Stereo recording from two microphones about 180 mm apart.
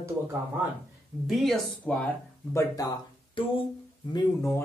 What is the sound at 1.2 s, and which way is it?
Speech, centre (ahead or behind).